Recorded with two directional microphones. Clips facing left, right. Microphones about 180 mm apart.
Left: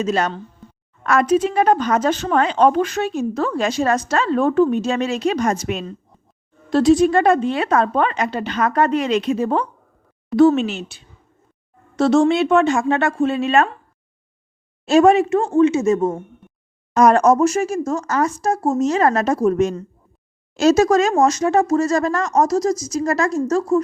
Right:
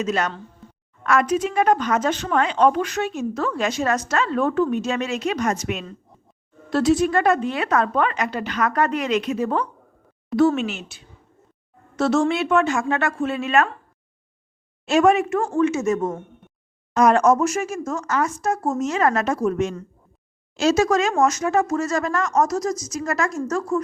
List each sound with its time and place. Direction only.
0.0 s a woman's voice: 30° left (ahead or behind)
14.8 s a woman's voice: 35° left (ahead or behind)
16.9 s a woman's voice: 45° left (ahead or behind)